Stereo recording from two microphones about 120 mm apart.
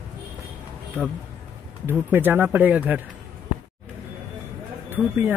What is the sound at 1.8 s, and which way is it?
Speech, 15° right (ahead or behind).